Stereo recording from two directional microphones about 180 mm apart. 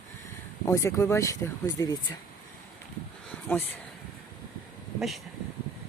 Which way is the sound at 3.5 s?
10° left (ahead or behind).